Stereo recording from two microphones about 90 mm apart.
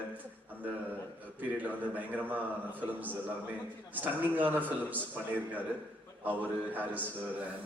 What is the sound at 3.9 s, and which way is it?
A man's voice, 20° right (ahead or behind).